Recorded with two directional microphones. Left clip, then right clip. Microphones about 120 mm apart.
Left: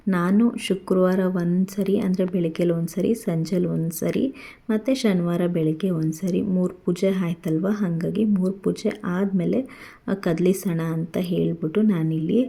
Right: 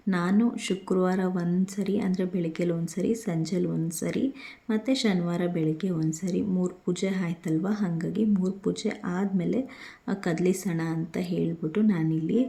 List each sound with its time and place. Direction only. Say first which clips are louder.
0.1 s speech: left 5 dB; 35° left (ahead or behind)